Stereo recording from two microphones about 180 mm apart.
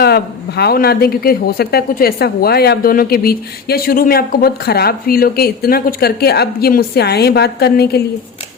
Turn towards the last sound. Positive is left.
turn(degrees=60)  # may be behind; listen again after turning